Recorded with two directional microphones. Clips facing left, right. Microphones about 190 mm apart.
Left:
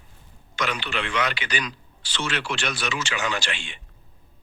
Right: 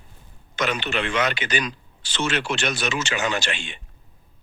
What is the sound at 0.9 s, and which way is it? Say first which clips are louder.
Speech: right 3 dB; 45° right (ahead or behind).